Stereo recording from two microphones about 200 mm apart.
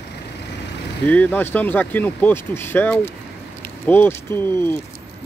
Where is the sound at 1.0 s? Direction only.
10° left (ahead or behind).